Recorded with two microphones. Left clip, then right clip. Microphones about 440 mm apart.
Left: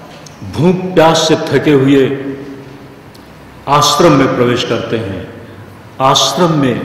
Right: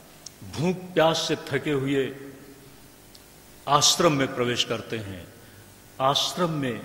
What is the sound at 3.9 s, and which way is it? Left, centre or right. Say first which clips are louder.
A man's voice: left 14 dB; right.